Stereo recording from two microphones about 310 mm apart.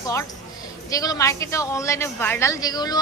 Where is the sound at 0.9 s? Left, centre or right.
Centre.